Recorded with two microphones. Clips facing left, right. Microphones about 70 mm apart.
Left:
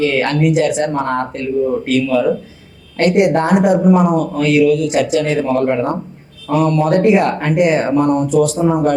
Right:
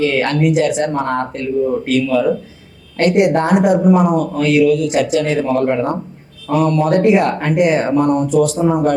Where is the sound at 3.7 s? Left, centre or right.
Left.